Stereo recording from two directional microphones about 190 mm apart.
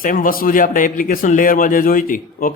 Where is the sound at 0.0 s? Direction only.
45° left (ahead or behind).